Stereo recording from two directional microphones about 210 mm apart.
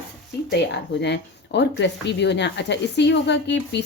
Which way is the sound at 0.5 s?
55° left (ahead or behind).